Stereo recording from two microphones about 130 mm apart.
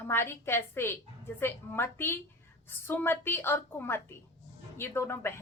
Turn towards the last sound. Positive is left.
turn(degrees=20)  # may be behind; listen again after turning